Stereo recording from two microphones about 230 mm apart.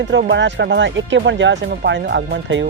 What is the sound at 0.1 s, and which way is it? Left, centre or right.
Speech, right.